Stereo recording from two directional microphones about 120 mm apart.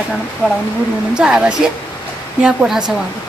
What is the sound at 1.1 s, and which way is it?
Speech, 5° right (ahead or behind).